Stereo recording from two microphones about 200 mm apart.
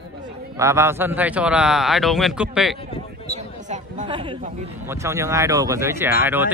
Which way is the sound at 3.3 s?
35° right (ahead or behind).